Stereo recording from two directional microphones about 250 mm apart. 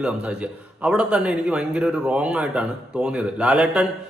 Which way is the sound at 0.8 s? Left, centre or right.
Centre.